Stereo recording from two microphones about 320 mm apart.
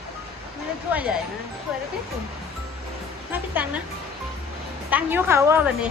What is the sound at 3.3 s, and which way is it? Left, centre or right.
Speech, centre.